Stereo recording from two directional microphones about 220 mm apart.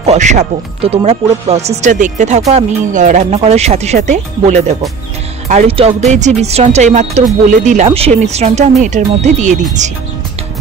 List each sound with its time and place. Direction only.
0.0 s speech: 30° right (ahead or behind)